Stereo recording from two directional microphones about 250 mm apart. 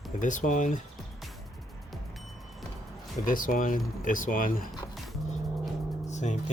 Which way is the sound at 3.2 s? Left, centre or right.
Left.